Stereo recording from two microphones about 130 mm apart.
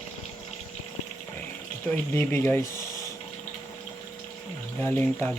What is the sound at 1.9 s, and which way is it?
Speech, 20° left (ahead or behind).